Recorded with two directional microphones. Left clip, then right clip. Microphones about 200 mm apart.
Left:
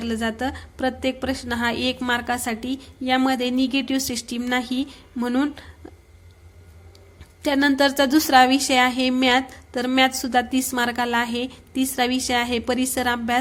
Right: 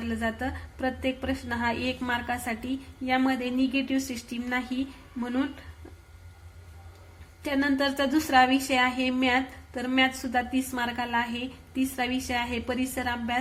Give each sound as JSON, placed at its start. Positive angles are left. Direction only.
{"t": 0.0, "sound": "a woman's voice", "side_deg": 35}
{"t": 7.4, "sound": "a woman's voice", "side_deg": 40}